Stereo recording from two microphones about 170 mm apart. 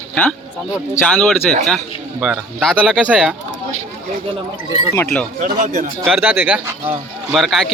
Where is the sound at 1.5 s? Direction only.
5° left (ahead or behind).